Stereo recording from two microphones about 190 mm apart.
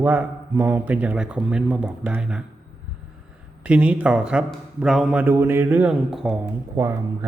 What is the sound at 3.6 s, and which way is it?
A man's voice, 5° right (ahead or behind).